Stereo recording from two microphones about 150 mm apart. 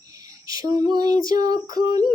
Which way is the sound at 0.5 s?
25° right (ahead or behind).